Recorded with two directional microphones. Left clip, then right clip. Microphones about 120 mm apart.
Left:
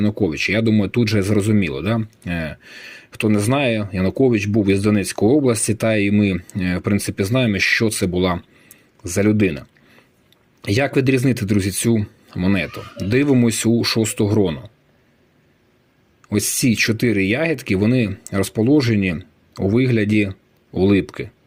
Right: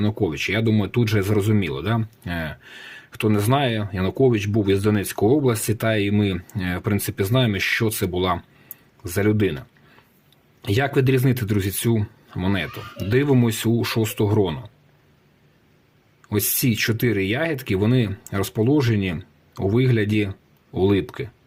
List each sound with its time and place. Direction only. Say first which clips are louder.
0.2 s speech: left 4 dB; 20° left (ahead or behind)
16.2 s speech: left 4 dB; 20° left (ahead or behind)